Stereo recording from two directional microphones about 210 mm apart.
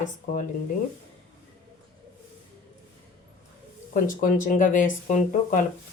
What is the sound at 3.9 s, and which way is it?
Speech, 40° left (ahead or behind).